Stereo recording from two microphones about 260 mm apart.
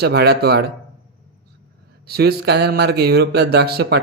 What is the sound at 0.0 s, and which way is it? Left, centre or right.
Speech, right.